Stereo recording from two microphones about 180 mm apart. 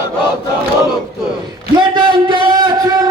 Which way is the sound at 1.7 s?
25° right (ahead or behind).